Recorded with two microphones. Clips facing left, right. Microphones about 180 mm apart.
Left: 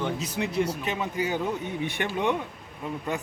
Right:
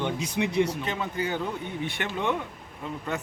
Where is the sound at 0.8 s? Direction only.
15° left (ahead or behind).